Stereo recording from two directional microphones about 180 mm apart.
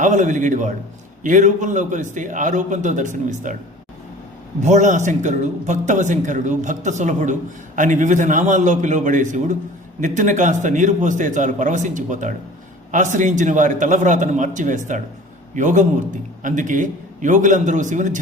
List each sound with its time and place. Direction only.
0.0 s speech: 40° right (ahead or behind)
4.6 s speech: 40° right (ahead or behind)